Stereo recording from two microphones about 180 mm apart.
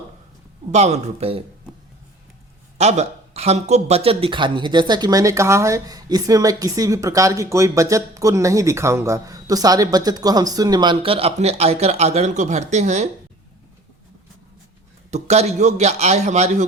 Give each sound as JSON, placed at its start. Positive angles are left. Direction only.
{"t": 0.7, "sound": "a man's voice", "side_deg": -40}
{"t": 2.7, "sound": "speech", "side_deg": -40}
{"t": 15.1, "sound": "a man's voice", "side_deg": -35}